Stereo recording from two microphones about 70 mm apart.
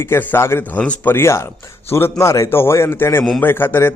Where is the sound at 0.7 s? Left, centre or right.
Centre.